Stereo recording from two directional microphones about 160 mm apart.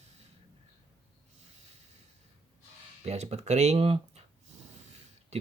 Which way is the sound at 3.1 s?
45° right (ahead or behind).